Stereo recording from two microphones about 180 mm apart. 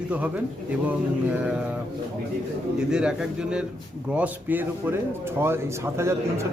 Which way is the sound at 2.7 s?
5° right (ahead or behind).